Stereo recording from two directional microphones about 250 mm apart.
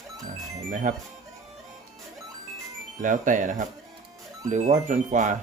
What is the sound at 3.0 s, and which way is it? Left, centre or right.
Speech, right.